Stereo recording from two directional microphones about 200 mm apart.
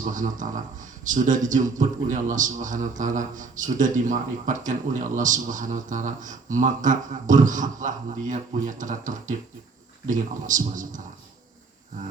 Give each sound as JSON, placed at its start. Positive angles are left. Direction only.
{"t": 0.0, "sound": "a man's voice", "side_deg": -40}